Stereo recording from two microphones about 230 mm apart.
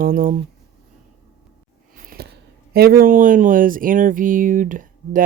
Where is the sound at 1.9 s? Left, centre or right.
Right.